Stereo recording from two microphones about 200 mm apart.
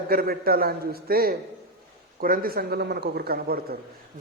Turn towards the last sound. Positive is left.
turn(degrees=-50)  # may be behind; listen again after turning